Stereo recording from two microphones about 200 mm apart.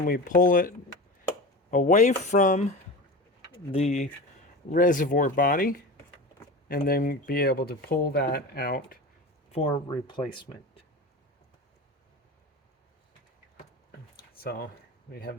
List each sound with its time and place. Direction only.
0.0 s speech: 40° left (ahead or behind)
1.7 s speech: 40° left (ahead or behind)
9.5 s speech: 25° left (ahead or behind)
14.3 s speech: 50° left (ahead or behind)